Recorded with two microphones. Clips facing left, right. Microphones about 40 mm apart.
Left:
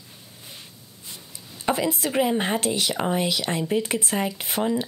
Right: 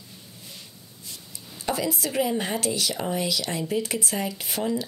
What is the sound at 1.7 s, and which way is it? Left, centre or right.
A woman's voice, left.